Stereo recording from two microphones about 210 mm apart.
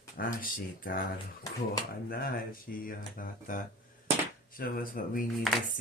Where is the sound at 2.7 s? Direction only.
40° left (ahead or behind).